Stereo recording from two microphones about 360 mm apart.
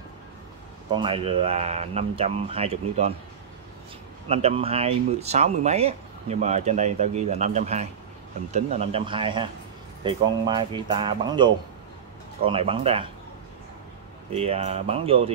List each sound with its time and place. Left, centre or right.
0.9 s speech: centre
4.3 s speech: centre
14.3 s speech: centre